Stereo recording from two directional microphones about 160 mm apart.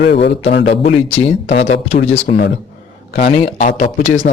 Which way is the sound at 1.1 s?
40° left (ahead or behind).